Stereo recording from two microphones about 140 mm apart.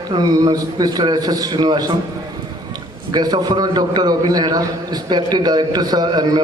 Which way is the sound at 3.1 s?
30° right (ahead or behind).